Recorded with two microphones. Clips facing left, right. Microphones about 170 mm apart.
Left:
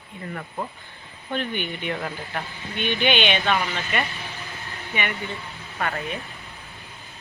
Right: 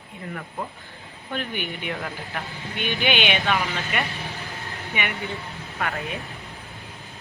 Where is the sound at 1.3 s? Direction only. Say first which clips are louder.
Left 2 dB; 5° right (ahead or behind).